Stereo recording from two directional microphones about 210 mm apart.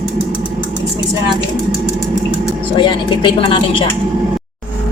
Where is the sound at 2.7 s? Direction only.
20° left (ahead or behind).